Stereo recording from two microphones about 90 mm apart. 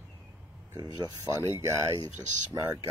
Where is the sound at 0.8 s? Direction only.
45° right (ahead or behind).